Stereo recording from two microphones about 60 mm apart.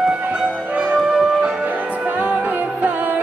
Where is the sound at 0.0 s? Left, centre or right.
Centre.